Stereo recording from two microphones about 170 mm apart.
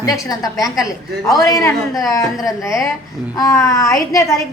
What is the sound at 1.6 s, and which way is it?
A woman's voice, 20° left (ahead or behind).